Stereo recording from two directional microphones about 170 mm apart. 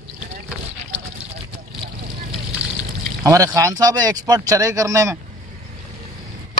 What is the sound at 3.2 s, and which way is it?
Speech, 20° right (ahead or behind).